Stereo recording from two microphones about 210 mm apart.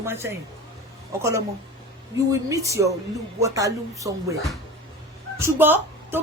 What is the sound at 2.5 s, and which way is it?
Speech, 15° right (ahead or behind).